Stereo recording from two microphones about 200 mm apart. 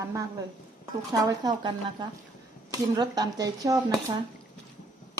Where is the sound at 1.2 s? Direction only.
20° right (ahead or behind).